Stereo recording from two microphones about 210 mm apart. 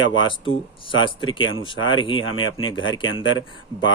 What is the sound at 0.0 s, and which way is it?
Speech, 65° left (ahead or behind).